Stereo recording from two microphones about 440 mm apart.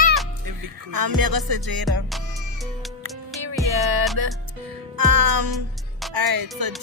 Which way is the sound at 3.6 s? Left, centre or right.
Right.